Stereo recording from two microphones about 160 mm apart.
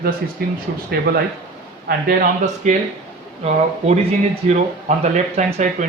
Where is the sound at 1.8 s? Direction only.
55° right (ahead or behind).